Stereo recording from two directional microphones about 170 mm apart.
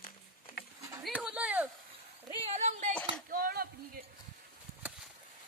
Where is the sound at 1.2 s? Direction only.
10° right (ahead or behind).